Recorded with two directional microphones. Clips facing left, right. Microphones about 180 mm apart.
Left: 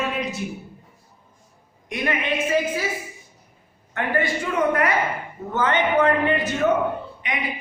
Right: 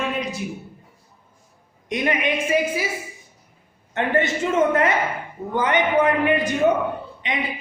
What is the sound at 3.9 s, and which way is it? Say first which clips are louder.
A man's voice: right 2 dB; 25° right (ahead or behind).